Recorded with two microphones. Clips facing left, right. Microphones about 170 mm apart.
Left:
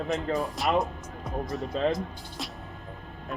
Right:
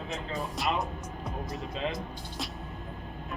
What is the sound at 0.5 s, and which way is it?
Speech, centre (ahead or behind).